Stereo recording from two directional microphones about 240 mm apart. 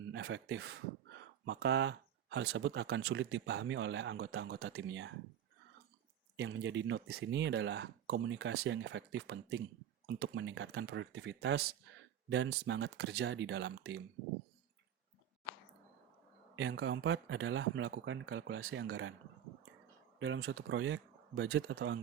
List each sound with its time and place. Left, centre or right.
0.1 s speech: right
6.3 s speech: right
16.6 s speech: right
20.1 s speech: right